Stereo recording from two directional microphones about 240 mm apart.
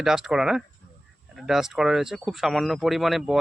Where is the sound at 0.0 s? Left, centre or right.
Centre.